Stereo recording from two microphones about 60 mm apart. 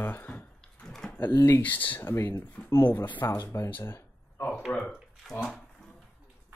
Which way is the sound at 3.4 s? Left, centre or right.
Left.